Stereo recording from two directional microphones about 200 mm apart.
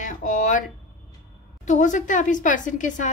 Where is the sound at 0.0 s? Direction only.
40° left (ahead or behind).